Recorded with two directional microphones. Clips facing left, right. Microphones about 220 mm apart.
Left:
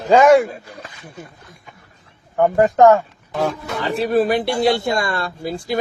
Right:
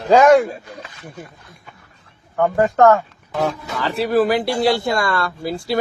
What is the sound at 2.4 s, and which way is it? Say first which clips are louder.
Speech: left 2 dB; 15° left (ahead or behind).